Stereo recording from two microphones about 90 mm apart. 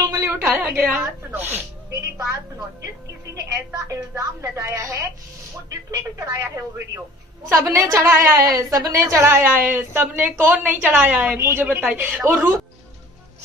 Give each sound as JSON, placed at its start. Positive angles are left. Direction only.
{"t": 0.0, "sound": "a sound", "side_deg": -35}
{"t": 0.3, "sound": "a woman's voice", "side_deg": -20}
{"t": 3.3, "sound": "a woman's voice", "side_deg": -40}
{"t": 9.0, "sound": "a woman's voice", "side_deg": -30}
{"t": 11.3, "sound": "a woman's voice", "side_deg": -30}